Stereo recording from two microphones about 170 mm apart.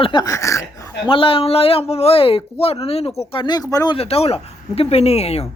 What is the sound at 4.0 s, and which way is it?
Speech, 35° left (ahead or behind).